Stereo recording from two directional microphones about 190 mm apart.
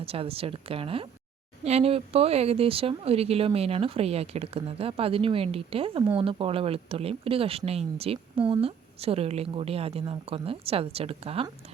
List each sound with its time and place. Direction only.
0.0 s speech: 30° right (ahead or behind)